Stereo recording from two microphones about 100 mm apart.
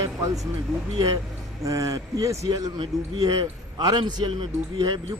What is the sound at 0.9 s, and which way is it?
A man's voice, 40° right (ahead or behind).